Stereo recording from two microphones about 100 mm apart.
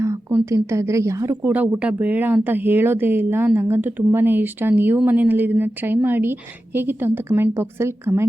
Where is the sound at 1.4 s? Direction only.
15° right (ahead or behind).